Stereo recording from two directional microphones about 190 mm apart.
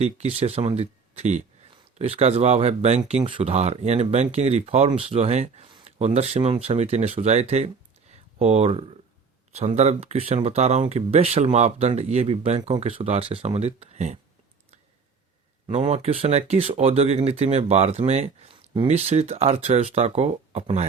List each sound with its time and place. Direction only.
0.0 s speech: 35° right (ahead or behind)
15.6 s speech: 30° right (ahead or behind)